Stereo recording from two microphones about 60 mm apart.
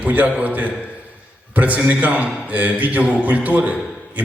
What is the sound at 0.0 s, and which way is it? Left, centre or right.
A man's voice, right.